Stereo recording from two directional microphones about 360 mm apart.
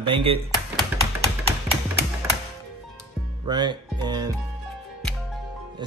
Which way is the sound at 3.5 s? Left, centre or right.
Centre.